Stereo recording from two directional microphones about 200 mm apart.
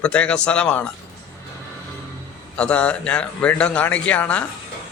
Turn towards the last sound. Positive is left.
turn(degrees=5)  # may be behind; listen again after turning